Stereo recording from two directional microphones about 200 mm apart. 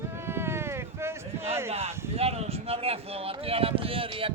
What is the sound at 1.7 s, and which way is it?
Speech, 30° right (ahead or behind).